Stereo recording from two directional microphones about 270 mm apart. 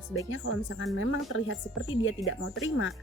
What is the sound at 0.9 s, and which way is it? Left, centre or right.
Speech, left.